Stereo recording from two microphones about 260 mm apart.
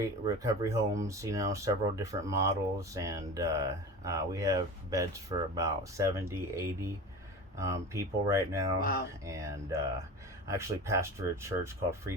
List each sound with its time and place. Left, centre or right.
0.4 s speech: centre
8.8 s speech: left
9.2 s speech: centre